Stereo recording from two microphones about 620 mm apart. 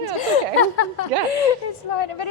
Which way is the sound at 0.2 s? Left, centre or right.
Left.